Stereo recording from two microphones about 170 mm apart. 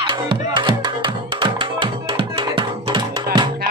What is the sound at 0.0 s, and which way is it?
Music, 30° right (ahead or behind).